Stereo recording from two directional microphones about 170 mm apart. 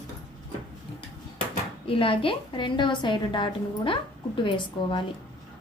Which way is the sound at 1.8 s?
30° left (ahead or behind).